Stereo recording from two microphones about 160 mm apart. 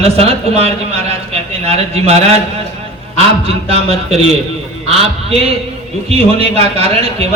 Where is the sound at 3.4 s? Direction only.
40° right (ahead or behind).